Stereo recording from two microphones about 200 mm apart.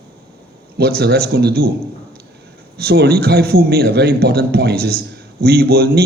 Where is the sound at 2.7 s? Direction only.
50° right (ahead or behind).